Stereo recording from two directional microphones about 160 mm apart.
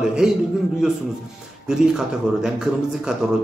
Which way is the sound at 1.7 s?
5° right (ahead or behind).